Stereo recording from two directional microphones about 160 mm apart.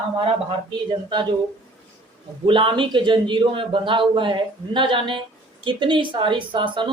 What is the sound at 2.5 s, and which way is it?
A man's voice, 30° right (ahead or behind).